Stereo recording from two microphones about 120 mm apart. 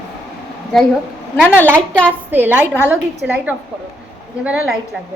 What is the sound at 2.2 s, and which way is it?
A woman's voice, 15° right (ahead or behind).